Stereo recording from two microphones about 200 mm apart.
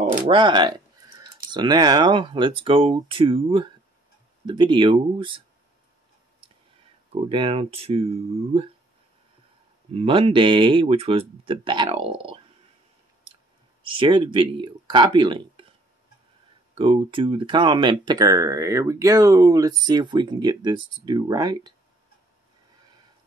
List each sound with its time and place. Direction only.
0.3 s speech: 25° right (ahead or behind)
7.2 s speech: 25° right (ahead or behind)
9.9 s speech: 30° right (ahead or behind)
13.8 s speech: 25° right (ahead or behind)
16.7 s speech: 25° right (ahead or behind)